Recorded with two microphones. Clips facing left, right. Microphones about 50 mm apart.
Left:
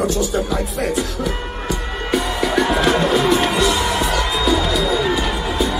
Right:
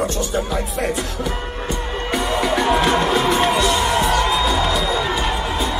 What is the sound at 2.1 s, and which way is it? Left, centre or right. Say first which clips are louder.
Music: left 1 dB; right.